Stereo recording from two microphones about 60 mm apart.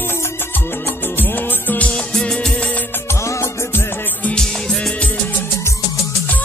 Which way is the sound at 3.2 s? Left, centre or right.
Left.